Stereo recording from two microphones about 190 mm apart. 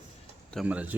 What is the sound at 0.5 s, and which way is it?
Speech, 5° right (ahead or behind).